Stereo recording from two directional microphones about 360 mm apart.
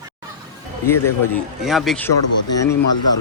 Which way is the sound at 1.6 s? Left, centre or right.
Centre.